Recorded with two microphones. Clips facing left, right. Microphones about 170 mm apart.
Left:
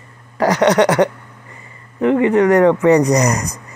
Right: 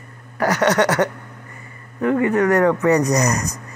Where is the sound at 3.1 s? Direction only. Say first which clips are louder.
Left 3 dB; 15° left (ahead or behind).